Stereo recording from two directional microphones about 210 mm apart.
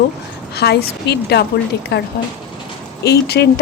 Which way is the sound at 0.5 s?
50° left (ahead or behind).